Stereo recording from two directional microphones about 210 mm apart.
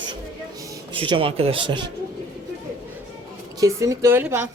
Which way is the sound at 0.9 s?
25° right (ahead or behind).